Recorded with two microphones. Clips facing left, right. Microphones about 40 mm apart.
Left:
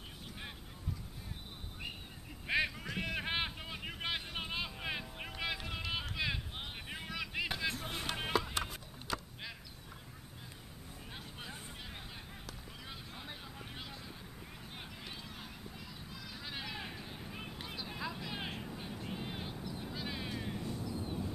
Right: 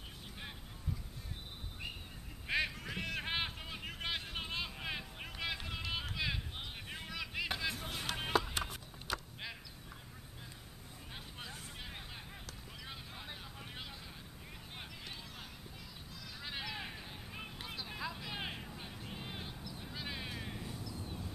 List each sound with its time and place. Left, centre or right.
2.4 s vehicle: centre
7.8 s music: centre
9.1 s vehicle: centre
12.8 s vehicle: centre
16.3 s vehicle: centre
19.8 s a sound: centre
20.8 s vehicle: left